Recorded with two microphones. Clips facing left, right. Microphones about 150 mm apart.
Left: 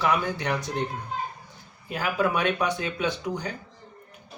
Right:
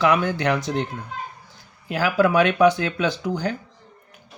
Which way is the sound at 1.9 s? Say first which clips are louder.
Right 6 dB; 90° right.